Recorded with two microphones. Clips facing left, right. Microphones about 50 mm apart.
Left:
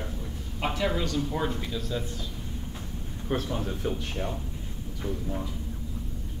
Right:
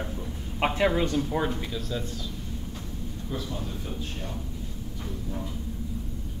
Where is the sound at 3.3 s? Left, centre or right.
Left.